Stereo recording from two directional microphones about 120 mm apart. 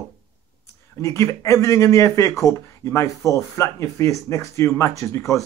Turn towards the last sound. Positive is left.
turn(degrees=25)  # may be behind; listen again after turning